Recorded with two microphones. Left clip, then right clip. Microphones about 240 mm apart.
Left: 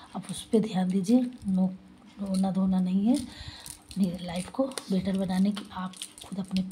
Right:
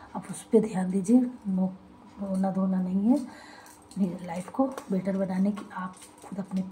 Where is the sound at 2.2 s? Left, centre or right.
Left.